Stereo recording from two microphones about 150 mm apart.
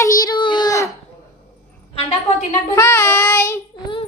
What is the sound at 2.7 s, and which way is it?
Speech, 15° left (ahead or behind).